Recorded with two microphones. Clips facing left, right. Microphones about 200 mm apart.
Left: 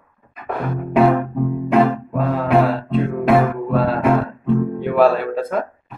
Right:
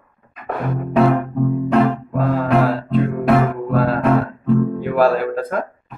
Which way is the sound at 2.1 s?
Centre (ahead or behind).